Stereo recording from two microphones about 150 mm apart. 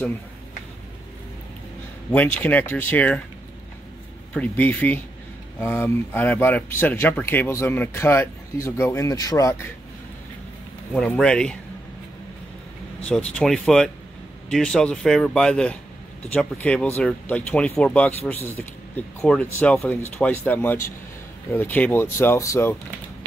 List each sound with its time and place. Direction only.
2.1 s speech: 10° left (ahead or behind)
4.3 s speech: 10° left (ahead or behind)
10.9 s speech: 5° left (ahead or behind)
13.0 s speech: 5° left (ahead or behind)